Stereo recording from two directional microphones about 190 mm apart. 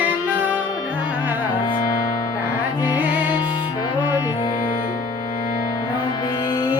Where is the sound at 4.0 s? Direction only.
20° left (ahead or behind).